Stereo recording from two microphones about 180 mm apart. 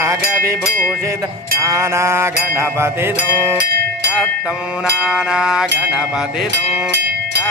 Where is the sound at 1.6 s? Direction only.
15° right (ahead or behind).